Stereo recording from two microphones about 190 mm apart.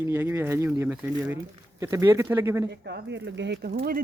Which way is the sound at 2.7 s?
60° right (ahead or behind).